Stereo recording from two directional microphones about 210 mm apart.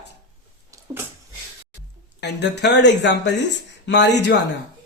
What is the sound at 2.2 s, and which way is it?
Speech, 55° left (ahead or behind).